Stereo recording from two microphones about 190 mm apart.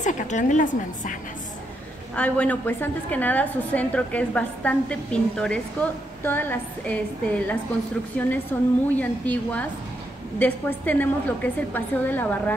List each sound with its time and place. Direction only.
0.0 s a woman's voice: 40° left (ahead or behind)
2.1 s a woman's voice: 5° left (ahead or behind)